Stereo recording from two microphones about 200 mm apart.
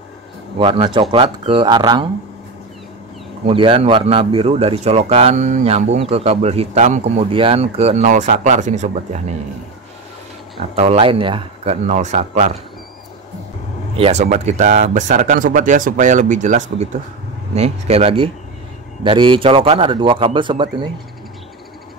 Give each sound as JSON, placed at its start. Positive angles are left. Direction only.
{"t": 0.6, "sound": "a man's voice", "side_deg": -25}
{"t": 3.4, "sound": "speech", "side_deg": -25}
{"t": 10.8, "sound": "speech", "side_deg": -30}
{"t": 13.9, "sound": "a man's voice", "side_deg": -30}